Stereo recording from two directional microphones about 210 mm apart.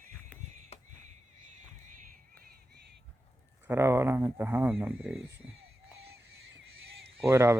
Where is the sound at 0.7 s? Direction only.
30° left (ahead or behind).